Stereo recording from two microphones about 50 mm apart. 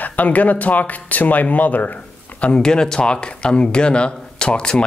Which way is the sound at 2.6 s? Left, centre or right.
Centre.